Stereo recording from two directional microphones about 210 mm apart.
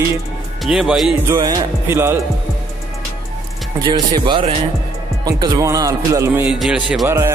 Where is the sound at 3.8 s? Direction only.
20° right (ahead or behind).